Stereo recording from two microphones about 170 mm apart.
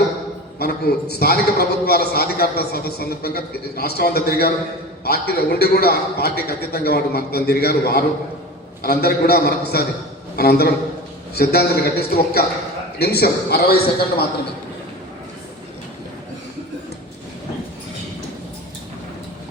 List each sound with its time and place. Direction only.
1.2 s a man's voice: 65° left (ahead or behind)